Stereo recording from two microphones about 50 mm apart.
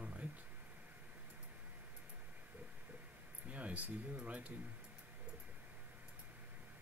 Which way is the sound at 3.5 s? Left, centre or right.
Right.